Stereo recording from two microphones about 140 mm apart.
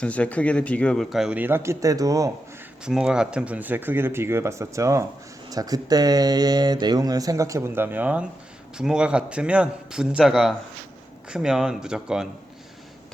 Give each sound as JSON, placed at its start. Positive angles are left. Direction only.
{"t": 0.0, "sound": "speech", "side_deg": 10}
{"t": 1.4, "sound": "speech", "side_deg": -15}
{"t": 2.8, "sound": "a man's voice", "side_deg": -5}